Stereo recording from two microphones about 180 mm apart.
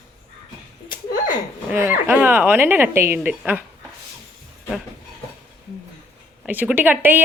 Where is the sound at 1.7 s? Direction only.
15° right (ahead or behind).